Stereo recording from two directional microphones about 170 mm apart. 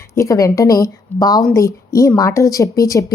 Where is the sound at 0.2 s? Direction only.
20° left (ahead or behind).